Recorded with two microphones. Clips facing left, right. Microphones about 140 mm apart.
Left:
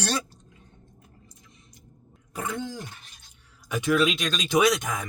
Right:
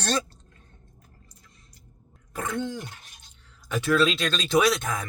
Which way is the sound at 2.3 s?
10° left (ahead or behind).